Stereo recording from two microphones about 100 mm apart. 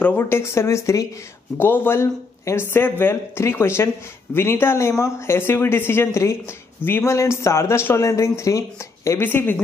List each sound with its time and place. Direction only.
0.0 s speech: 20° left (ahead or behind)
9.2 s speech: 20° left (ahead or behind)